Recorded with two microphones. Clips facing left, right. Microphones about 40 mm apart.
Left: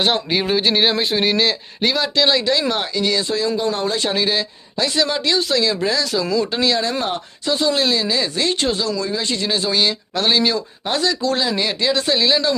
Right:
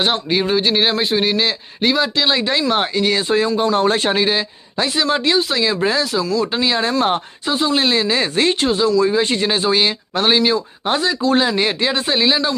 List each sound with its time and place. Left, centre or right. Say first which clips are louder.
0.0 s a man's voice: right 1 dB; centre
2.4 s speech: right 2 dB; right
4.1 s speech: right 2 dB; right
7.7 s speech: right 4 dB; right
8.5 s speech: right 4 dB; centre
9.0 s speech: right 7 dB; right
11.3 s speech: right 4 dB; right